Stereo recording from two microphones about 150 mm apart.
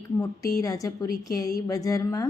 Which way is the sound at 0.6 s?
20° left (ahead or behind).